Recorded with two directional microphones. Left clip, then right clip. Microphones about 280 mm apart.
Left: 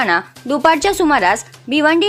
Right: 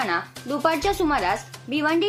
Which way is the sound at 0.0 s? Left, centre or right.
Left.